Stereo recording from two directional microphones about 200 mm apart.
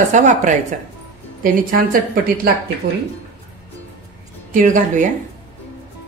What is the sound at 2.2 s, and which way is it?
Speech, 45° right (ahead or behind).